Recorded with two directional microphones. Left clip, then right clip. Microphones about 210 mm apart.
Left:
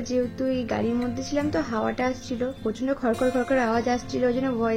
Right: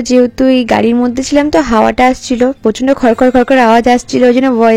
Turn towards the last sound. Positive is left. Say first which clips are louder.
# right 16 dB
turn(degrees=-50)  # may be behind; listen again after turning